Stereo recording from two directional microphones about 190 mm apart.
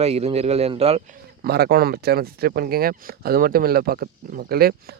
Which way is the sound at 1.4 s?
55° right (ahead or behind).